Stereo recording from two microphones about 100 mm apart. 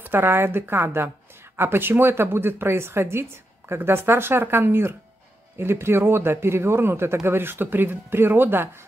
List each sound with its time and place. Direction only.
0.0 s a woman's voice: 20° right (ahead or behind)